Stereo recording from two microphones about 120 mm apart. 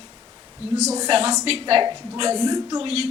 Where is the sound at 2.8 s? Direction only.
60° right (ahead or behind).